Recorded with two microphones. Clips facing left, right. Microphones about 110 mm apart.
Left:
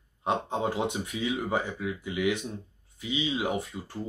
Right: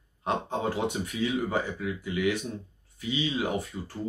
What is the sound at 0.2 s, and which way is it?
Speech, 20° left (ahead or behind).